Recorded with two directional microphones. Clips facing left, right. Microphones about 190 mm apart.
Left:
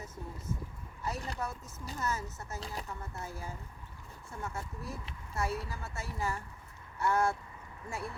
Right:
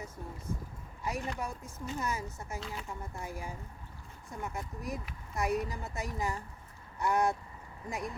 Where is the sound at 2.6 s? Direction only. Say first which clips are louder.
Left 1 dB; 35° left (ahead or behind).